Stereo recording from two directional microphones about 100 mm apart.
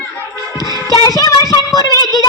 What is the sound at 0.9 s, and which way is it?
Child singing, 35° left (ahead or behind).